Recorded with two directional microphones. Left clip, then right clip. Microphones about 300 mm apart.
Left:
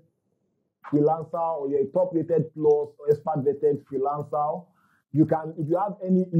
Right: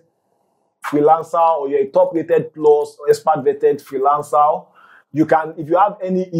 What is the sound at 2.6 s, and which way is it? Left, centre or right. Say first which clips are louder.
Speech: right 8 dB; right.